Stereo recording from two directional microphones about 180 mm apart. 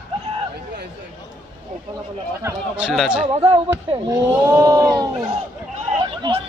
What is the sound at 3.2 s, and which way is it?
Speech, 35° right (ahead or behind).